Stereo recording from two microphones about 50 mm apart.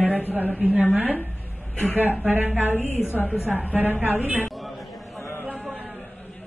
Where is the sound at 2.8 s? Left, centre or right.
Left.